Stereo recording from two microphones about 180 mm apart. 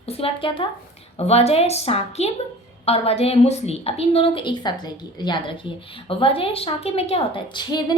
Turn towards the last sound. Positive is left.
turn(degrees=25)  # may be behind; listen again after turning